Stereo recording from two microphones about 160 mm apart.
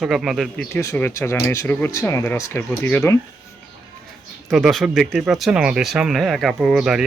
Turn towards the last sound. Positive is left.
turn(degrees=-5)  # may be behind; listen again after turning